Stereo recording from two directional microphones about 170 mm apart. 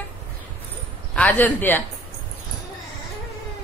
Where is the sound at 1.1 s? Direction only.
10° left (ahead or behind).